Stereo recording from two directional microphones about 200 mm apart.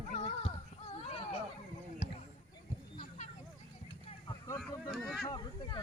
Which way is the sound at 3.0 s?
40° left (ahead or behind).